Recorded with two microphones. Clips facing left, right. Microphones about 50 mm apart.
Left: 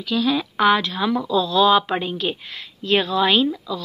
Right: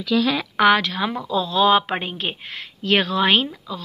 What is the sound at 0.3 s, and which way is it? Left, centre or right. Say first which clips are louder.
Speech: left 1 dB; right.